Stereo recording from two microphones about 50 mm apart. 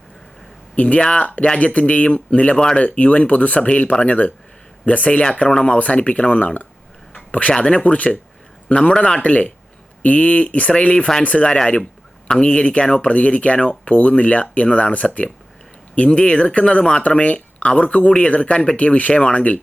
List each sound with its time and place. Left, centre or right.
0.8 s speech: left
5.5 s speech: centre
5.8 s speech: left
7.1 s a sound: left
7.5 s speech: left